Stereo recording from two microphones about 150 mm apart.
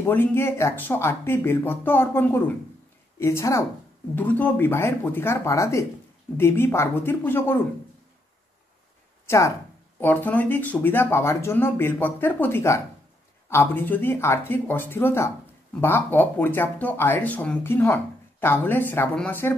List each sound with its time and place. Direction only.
0.0 s speech: 15° left (ahead or behind)
9.9 s speech: 10° left (ahead or behind)